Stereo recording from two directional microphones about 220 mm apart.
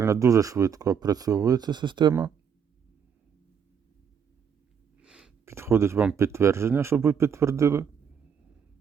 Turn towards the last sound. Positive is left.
turn(degrees=-15)  # may be behind; listen again after turning